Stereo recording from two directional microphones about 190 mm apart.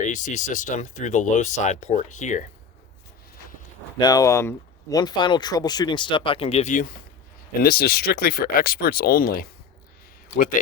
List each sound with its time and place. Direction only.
0.0 s speech: 40° left (ahead or behind)
4.0 s speech: 20° left (ahead or behind); by 6.9 s 40° left (ahead or behind)
7.6 s speech: 50° left (ahead or behind)